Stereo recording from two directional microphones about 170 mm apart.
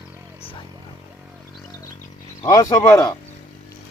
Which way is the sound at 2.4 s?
20° left (ahead or behind).